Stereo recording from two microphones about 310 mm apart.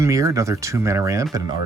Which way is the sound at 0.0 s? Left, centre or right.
Centre.